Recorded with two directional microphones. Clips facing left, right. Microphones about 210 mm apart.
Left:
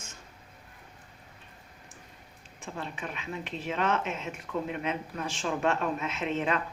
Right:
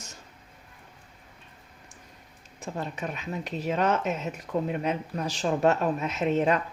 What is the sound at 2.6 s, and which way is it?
Speech, 40° right (ahead or behind).